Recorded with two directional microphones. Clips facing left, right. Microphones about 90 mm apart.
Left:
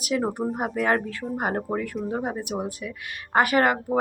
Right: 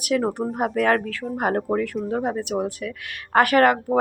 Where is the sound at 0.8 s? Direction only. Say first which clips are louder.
Right 3 dB; 20° left (ahead or behind).